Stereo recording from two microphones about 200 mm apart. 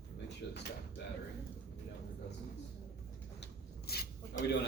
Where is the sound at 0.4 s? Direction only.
60° left (ahead or behind).